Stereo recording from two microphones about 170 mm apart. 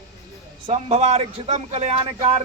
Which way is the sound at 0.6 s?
35° right (ahead or behind).